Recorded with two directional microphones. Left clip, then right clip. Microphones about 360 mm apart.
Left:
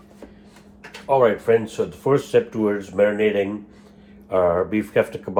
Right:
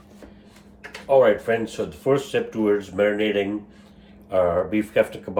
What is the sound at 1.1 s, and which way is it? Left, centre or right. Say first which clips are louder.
Speech: left 1 dB; centre.